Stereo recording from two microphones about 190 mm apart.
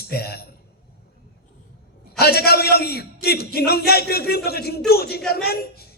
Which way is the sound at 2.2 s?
55° left (ahead or behind).